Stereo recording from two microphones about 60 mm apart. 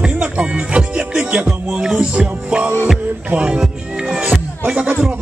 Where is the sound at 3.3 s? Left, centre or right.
Centre.